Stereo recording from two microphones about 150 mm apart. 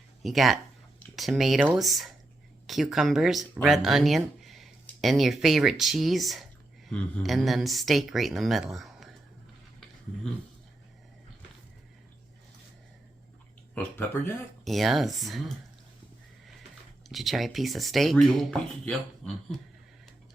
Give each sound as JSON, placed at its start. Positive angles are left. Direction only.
{"t": 0.2, "sound": "speech", "side_deg": 0}
{"t": 13.7, "sound": "speech", "side_deg": 15}
{"t": 14.6, "sound": "speech", "side_deg": 0}
{"t": 17.1, "sound": "speech", "side_deg": 0}